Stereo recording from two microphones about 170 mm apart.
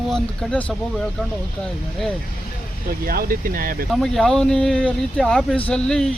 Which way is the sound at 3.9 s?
Centre (ahead or behind).